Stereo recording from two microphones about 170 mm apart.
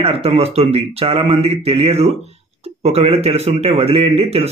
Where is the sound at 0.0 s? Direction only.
35° right (ahead or behind).